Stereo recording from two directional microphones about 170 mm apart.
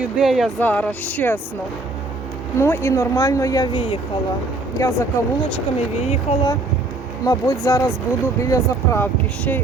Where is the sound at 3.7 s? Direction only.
35° left (ahead or behind).